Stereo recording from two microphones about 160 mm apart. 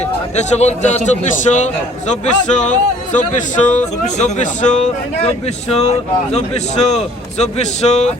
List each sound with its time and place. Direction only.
0.0 s a man's voice: 45° left (ahead or behind)